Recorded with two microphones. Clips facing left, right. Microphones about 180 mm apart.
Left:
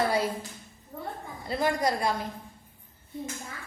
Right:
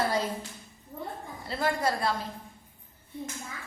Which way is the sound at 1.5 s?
15° left (ahead or behind).